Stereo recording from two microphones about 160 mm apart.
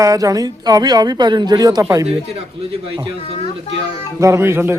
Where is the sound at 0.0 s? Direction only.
20° right (ahead or behind).